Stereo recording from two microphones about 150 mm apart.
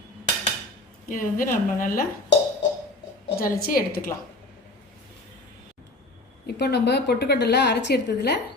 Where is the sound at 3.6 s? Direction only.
75° left (ahead or behind).